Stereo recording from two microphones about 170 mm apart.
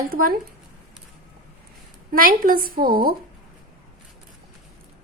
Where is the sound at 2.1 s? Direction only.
55° right (ahead or behind).